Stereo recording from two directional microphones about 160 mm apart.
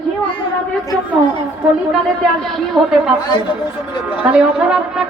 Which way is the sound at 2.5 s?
Centre (ahead or behind).